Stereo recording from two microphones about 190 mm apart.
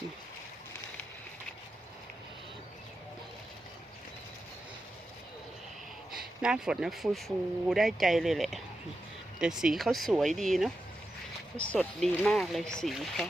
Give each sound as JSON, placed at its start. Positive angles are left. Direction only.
{"t": 6.4, "sound": "speech", "side_deg": -5}